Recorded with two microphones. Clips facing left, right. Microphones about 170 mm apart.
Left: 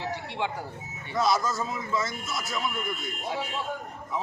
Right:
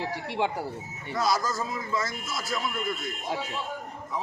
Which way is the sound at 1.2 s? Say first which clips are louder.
Left 1 dB; centre (ahead or behind).